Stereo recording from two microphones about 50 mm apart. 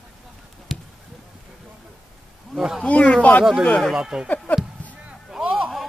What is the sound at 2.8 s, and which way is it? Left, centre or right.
Speech, left.